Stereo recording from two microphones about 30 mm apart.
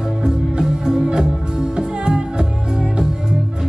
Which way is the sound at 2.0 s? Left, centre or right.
Right.